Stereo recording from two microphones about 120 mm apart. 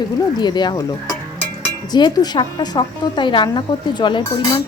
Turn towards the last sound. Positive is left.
turn(degrees=40)  # may be behind; listen again after turning